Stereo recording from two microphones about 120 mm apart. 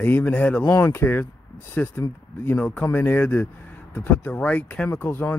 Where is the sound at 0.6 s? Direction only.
30° left (ahead or behind).